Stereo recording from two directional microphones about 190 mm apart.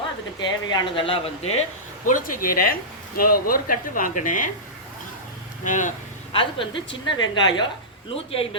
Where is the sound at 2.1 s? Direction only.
45° left (ahead or behind).